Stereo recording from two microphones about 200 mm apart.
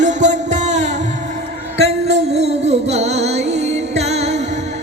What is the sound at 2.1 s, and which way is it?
Music, 30° right (ahead or behind).